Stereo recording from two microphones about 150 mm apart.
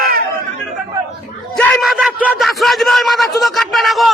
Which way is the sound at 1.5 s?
5° left (ahead or behind).